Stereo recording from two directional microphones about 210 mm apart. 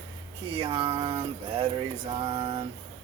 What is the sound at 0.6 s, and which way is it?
Music, 25° right (ahead or behind).